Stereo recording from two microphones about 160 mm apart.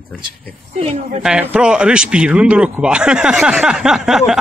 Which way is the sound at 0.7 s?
40° right (ahead or behind).